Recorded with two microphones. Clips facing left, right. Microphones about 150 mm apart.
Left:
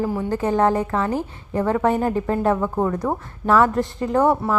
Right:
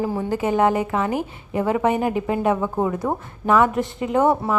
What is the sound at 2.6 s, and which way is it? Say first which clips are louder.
Speech: left 1 dB; 5° right (ahead or behind).